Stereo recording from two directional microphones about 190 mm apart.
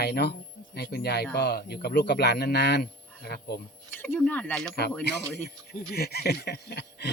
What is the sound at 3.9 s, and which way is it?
Speech, 10° left (ahead or behind).